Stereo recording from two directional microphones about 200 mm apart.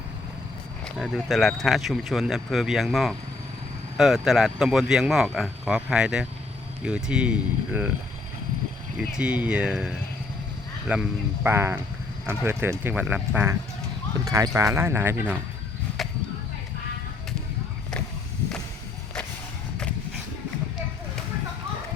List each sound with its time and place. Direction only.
0.9 s speech: centre (ahead or behind)
9.0 s speech: 5° right (ahead or behind)
16.0 s chop: centre (ahead or behind)